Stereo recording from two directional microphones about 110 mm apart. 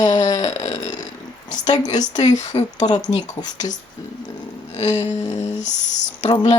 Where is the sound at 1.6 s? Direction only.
40° left (ahead or behind).